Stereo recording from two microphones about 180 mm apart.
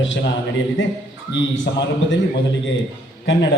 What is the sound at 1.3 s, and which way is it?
Speech, 90° left.